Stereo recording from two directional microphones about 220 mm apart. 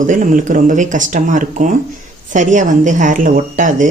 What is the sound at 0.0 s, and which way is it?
Speech, 35° right (ahead or behind).